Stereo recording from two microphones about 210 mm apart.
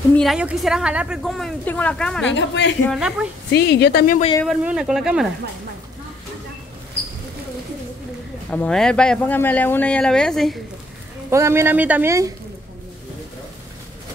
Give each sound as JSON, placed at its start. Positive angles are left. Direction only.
{"t": 0.1, "sound": "a woman's voice", "side_deg": 0}
{"t": 2.3, "sound": "a man's voice", "side_deg": 55}
{"t": 2.8, "sound": "a woman's voice", "side_deg": 0}
{"t": 3.5, "sound": "speech", "side_deg": 50}
{"t": 4.5, "sound": "a woman's voice", "side_deg": -5}
{"t": 8.5, "sound": "a woman's voice", "side_deg": 5}
{"t": 11.2, "sound": "speech", "side_deg": -15}